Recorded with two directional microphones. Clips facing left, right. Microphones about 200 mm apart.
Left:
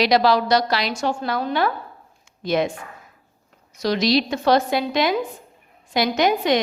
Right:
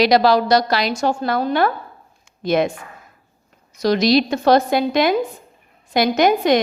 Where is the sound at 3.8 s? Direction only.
50° right (ahead or behind).